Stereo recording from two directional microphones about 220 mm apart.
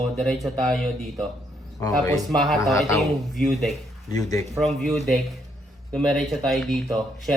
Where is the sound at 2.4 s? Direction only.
Centre (ahead or behind).